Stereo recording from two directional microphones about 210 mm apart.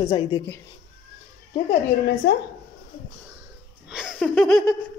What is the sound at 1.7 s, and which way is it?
Speech, 55° left (ahead or behind).